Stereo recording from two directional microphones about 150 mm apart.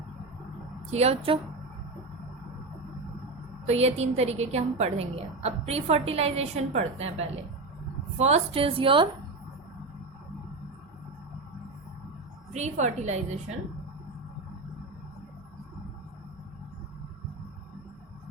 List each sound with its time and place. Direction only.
0.9 s a woman's voice: 45° right (ahead or behind)
3.7 s a woman's voice: 45° right (ahead or behind)
12.5 s a woman's voice: 50° right (ahead or behind)